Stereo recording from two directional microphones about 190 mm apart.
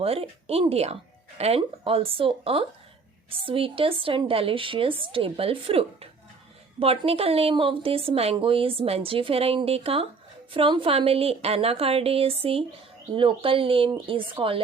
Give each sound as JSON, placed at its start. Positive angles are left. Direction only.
{"t": 0.0, "sound": "a woman's voice", "side_deg": -30}